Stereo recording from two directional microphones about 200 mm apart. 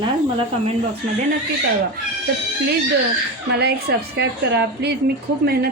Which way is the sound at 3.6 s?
55° right (ahead or behind).